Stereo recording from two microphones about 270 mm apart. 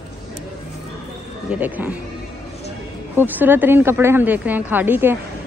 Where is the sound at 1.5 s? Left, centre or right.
Centre.